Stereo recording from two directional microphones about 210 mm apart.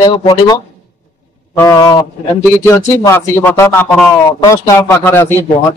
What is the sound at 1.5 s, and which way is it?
Speech, 20° left (ahead or behind).